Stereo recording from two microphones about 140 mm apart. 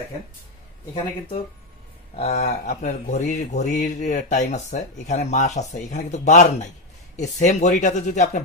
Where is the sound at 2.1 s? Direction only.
55° left (ahead or behind).